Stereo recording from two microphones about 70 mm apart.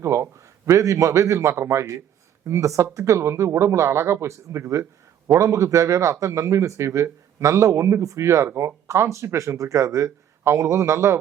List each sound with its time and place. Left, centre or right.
0.0 s a man's voice: right